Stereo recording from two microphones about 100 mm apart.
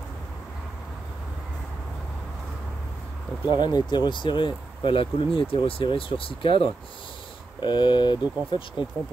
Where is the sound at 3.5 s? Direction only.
45° left (ahead or behind); by 6.7 s 65° left (ahead or behind).